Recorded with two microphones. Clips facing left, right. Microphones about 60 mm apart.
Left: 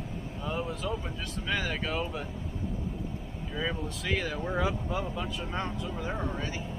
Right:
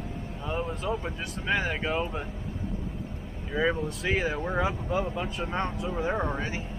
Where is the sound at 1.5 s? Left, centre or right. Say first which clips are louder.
Right 4 dB; centre.